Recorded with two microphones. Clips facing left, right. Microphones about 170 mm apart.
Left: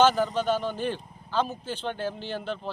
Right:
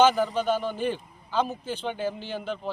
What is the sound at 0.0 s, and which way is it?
A man's voice, 10° right (ahead or behind).